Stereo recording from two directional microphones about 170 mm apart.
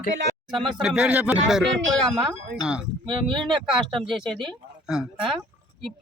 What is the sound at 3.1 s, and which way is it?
Speech, 30° right (ahead or behind).